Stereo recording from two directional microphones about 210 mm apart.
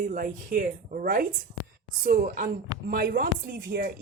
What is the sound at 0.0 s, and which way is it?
A woman's voice, 40° right (ahead or behind).